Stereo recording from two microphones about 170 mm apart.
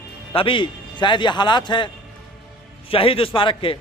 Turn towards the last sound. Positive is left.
turn(degrees=30)  # may be behind; listen again after turning